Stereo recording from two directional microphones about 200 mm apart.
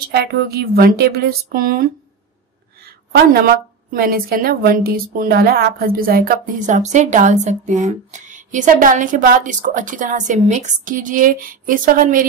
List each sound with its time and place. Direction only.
0.1 s a woman's voice: 50° right (ahead or behind)
3.1 s a woman's voice: 50° right (ahead or behind)